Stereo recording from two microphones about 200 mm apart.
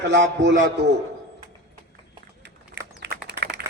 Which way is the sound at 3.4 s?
55° right (ahead or behind).